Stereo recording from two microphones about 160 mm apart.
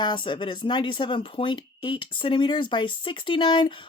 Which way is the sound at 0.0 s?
30° left (ahead or behind).